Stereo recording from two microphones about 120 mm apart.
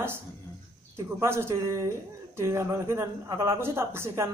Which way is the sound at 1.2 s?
20° right (ahead or behind).